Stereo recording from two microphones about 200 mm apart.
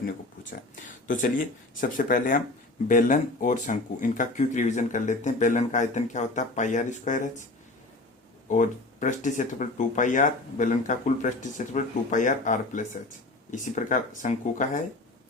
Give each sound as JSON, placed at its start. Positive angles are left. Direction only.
{"t": 1.0, "sound": "speech", "side_deg": 40}
{"t": 8.4, "sound": "speech", "side_deg": 40}